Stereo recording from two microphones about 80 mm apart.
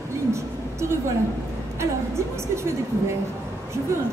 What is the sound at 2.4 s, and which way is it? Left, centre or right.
Speech, right.